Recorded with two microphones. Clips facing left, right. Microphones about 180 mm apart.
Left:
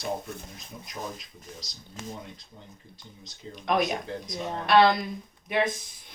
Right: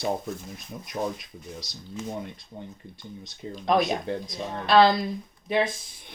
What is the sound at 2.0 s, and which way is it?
Speech, 80° left.